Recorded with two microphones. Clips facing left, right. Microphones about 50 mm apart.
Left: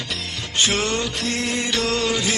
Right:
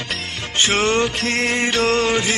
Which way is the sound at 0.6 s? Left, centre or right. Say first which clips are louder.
Right 4 dB; right.